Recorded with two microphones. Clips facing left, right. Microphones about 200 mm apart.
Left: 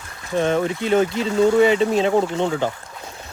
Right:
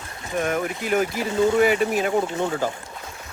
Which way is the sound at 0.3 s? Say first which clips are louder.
Left 5 dB; 25° left (ahead or behind).